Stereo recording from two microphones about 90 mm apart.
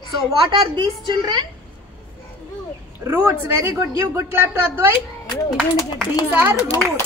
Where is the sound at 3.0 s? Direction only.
25° right (ahead or behind).